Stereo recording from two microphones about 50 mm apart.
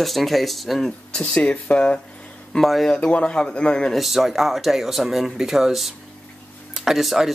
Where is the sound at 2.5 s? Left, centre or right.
Centre.